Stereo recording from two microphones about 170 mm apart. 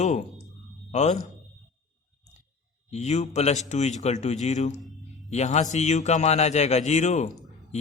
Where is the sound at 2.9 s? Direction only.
40° left (ahead or behind).